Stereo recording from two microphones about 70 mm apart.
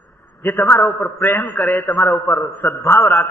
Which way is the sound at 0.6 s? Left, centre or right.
Left.